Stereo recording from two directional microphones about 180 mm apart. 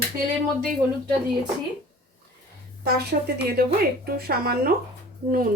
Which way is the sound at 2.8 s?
65° right (ahead or behind).